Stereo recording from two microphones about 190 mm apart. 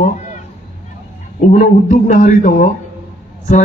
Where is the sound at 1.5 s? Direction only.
45° left (ahead or behind).